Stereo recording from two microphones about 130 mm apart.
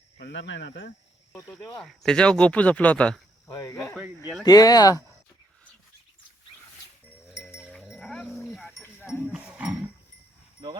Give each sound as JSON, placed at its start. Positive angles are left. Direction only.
{"t": 1.4, "sound": "speech", "side_deg": 15}
{"t": 3.5, "sound": "speech", "side_deg": 25}
{"t": 7.3, "sound": "livestock", "side_deg": 0}
{"t": 8.6, "sound": "livestock", "side_deg": 15}
{"t": 9.2, "sound": "speech", "side_deg": -10}